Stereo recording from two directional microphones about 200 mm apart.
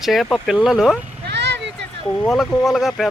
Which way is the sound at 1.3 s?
60° right (ahead or behind).